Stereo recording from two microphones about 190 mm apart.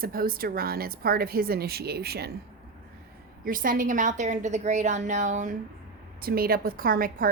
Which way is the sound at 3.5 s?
45° right (ahead or behind).